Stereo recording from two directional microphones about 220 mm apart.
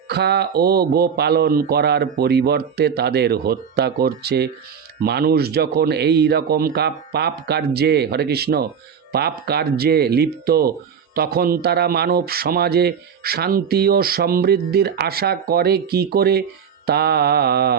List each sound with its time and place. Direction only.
0.1 s speech: 50° right (ahead or behind)